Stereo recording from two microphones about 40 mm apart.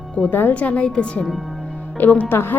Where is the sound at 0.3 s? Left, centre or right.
Left.